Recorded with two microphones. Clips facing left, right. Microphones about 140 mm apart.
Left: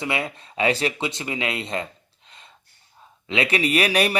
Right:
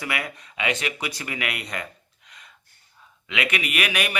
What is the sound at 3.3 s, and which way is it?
Speech, 30° left (ahead or behind).